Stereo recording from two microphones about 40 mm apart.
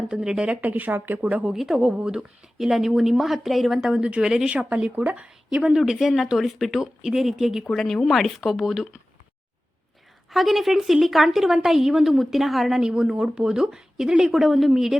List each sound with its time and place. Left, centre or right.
0.1 s speech: centre
0.6 s speech: right
0.9 s speech: right
1.2 s speech: right
1.5 s speech: centre
3.9 s speech: right
4.5 s speech: right
5.7 s speech: centre
7.7 s speech: centre
10.2 s speech: centre
12.8 s speech: centre